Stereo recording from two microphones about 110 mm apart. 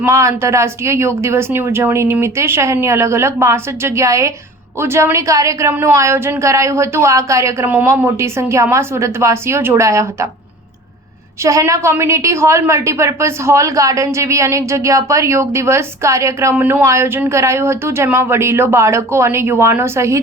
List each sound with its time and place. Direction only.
0.0 s a woman's voice: 25° right (ahead or behind)
11.4 s a woman's voice: 30° right (ahead or behind)